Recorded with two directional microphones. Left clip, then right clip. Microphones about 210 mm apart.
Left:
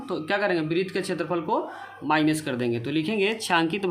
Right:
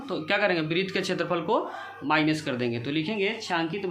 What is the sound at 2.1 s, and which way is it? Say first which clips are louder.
Speech: left 1 dB; 25° left (ahead or behind).